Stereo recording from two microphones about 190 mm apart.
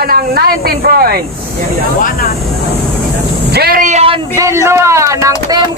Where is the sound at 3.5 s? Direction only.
50° right (ahead or behind); by 4.2 s 35° right (ahead or behind).